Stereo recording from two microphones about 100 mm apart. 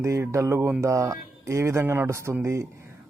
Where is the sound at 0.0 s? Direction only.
30° right (ahead or behind).